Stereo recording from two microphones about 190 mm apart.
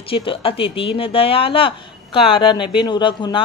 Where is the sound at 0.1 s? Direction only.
30° left (ahead or behind).